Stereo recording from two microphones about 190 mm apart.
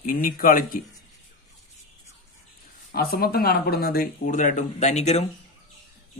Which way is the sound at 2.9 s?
50° left (ahead or behind).